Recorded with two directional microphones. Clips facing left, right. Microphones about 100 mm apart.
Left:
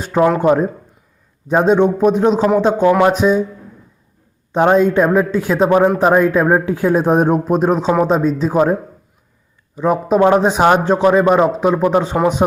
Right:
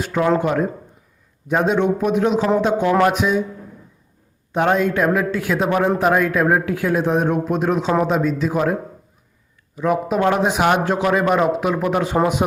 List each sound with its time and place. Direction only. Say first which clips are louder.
0.0 s speech: left 5 dB; 35° left (ahead or behind)
4.5 s a man's voice: left 6 dB; 30° left (ahead or behind)